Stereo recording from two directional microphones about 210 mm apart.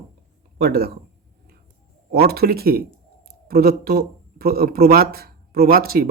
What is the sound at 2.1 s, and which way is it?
Speech, 50° right (ahead or behind).